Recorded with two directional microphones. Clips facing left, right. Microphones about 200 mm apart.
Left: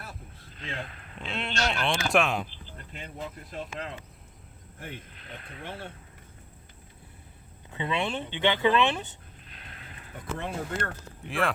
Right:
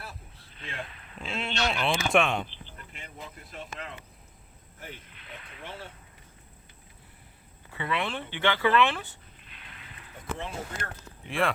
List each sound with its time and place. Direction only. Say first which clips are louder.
0.6 s speech: left 2 dB; 35° left (ahead or behind)
1.2 s speech: even; centre (ahead or behind)
5.6 s speech: left 2 dB; 55° left (ahead or behind)
7.7 s speech: left 2 dB; 20° left (ahead or behind)
10.3 s speech: left 4 dB; 60° left (ahead or behind)
11.3 s speech: right 1 dB; centre (ahead or behind)